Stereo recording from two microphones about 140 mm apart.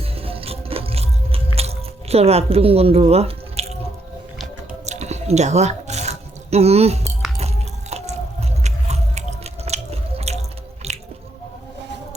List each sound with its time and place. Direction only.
0.2 s biting: 45° right (ahead or behind)
4.9 s a sound: 55° right (ahead or behind)
7.3 s chewing: 50° right (ahead or behind)
10.8 s squish: 50° right (ahead or behind)